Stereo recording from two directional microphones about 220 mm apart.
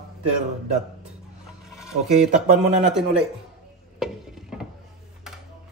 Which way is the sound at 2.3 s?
30° right (ahead or behind).